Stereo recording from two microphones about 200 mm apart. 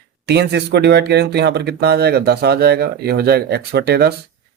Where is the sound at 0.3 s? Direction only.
55° right (ahead or behind).